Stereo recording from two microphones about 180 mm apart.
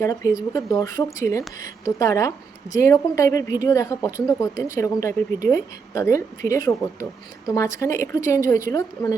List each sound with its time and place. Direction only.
0.0 s a woman's voice: 20° left (ahead or behind)